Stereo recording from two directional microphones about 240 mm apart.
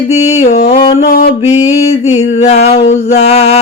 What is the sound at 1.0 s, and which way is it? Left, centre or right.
Mantra, left.